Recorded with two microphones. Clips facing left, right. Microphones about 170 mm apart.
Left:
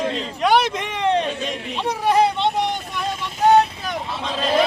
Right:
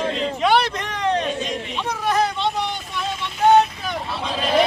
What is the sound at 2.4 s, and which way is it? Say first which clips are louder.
Vehicle: left 3 dB; 55° left (ahead or behind).